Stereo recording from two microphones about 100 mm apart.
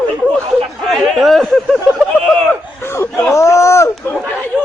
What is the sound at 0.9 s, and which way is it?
Speech, centre (ahead or behind).